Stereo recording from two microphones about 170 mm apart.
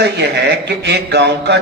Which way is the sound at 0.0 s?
85° right.